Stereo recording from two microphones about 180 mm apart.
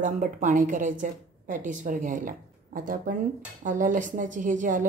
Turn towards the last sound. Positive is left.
turn(degrees=-45)  # may be behind; listen again after turning